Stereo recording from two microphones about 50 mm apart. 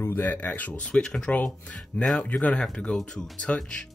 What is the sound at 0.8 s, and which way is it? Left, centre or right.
Speech, centre.